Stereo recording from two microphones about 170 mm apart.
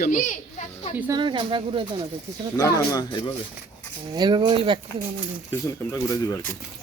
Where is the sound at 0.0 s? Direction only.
50° left (ahead or behind).